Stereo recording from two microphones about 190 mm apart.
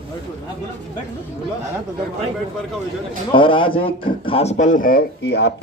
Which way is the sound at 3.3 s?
25° left (ahead or behind).